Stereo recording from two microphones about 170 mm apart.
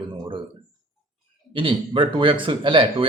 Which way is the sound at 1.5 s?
30° right (ahead or behind).